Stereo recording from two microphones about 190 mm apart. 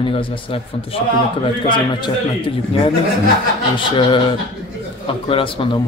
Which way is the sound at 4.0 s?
25° left (ahead or behind).